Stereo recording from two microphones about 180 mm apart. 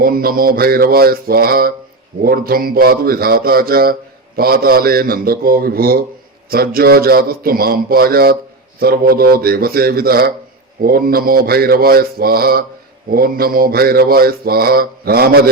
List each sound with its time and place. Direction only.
0.0 s mantra: 55° right (ahead or behind)